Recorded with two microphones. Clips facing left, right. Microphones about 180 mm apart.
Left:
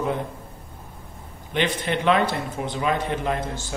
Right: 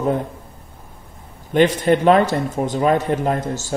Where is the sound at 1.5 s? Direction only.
45° right (ahead or behind).